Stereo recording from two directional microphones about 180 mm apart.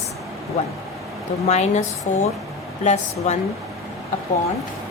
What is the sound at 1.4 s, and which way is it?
A woman's voice, 40° left (ahead or behind).